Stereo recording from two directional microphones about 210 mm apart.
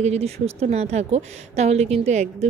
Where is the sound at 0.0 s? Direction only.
30° right (ahead or behind).